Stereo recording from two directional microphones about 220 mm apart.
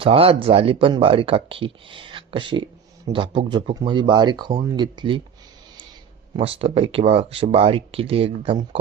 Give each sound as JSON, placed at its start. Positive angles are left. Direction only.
{"t": 0.0, "sound": "speech", "side_deg": -25}
{"t": 6.3, "sound": "speech", "side_deg": -25}